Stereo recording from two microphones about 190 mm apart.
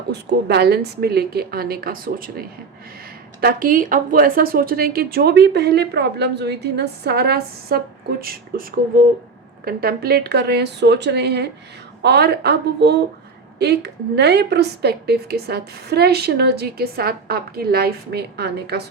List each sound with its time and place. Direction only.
0.1 s a woman's voice: 60° right (ahead or behind)
3.4 s a woman's voice: 45° right (ahead or behind)